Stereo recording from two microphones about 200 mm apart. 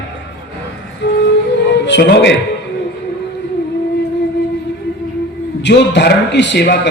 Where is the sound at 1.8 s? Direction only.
60° left (ahead or behind).